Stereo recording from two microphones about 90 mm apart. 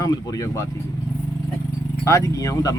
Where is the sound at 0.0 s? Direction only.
45° left (ahead or behind).